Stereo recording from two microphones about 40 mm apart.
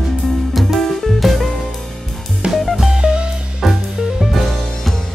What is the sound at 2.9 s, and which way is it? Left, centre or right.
Music, right.